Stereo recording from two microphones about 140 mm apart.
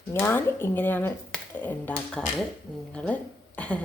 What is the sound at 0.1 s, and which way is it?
A woman's voice, 15° left (ahead or behind).